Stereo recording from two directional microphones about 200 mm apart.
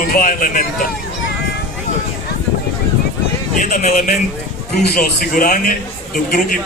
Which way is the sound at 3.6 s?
40° left (ahead or behind).